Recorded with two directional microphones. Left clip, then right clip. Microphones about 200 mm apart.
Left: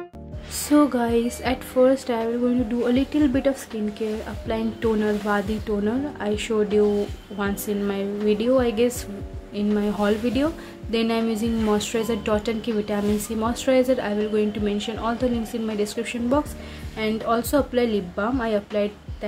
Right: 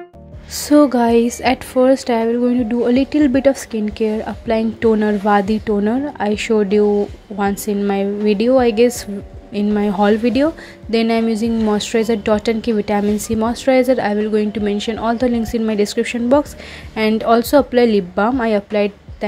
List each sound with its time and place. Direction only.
0.7 s a woman's voice: 25° right (ahead or behind)